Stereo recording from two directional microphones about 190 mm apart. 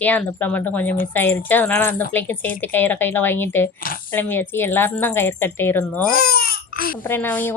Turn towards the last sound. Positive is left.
turn(degrees=10)  # may be behind; listen again after turning